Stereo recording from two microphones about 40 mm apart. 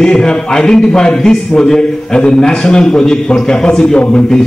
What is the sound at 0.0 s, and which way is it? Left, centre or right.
A man's voice, centre.